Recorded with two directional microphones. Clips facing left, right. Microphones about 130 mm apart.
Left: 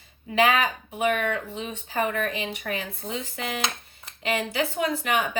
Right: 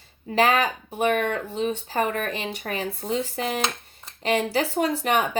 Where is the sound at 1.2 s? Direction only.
35° right (ahead or behind).